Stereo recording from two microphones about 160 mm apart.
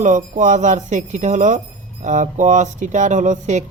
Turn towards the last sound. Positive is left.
turn(degrees=-50)  # may be behind; listen again after turning